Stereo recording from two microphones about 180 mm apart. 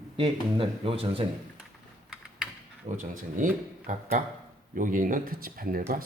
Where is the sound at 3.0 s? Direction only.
45° right (ahead or behind).